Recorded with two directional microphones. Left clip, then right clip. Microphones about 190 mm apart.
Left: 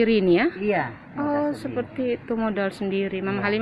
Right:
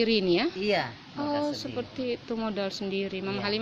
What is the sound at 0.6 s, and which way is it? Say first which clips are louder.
Speech: left 3 dB; 55° right (ahead or behind).